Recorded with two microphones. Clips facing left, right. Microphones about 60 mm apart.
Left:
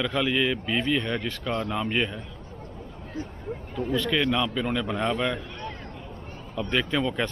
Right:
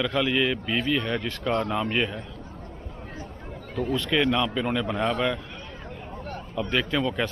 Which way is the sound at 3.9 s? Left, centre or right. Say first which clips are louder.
Right 1 dB; centre.